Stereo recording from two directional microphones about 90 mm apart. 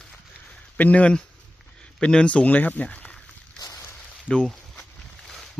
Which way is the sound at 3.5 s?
40° left (ahead or behind).